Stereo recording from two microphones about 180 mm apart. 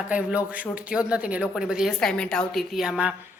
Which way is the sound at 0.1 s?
5° right (ahead or behind).